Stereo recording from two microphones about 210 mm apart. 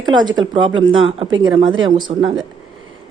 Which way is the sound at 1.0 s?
25° right (ahead or behind).